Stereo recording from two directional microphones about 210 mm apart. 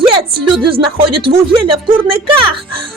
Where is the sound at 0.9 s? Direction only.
25° right (ahead or behind).